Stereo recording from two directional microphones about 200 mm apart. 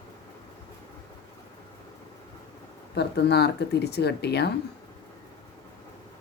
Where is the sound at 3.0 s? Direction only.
55° left (ahead or behind).